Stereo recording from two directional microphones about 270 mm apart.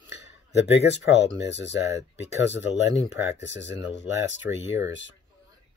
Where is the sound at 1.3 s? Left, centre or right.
Left.